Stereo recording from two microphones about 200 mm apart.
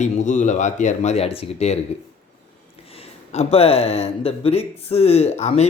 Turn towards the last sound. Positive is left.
turn(degrees=35)  # may be behind; listen again after turning